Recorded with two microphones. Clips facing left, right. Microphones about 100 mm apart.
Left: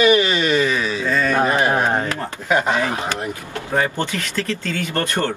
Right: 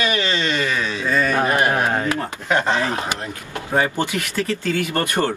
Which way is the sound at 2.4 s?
10° left (ahead or behind).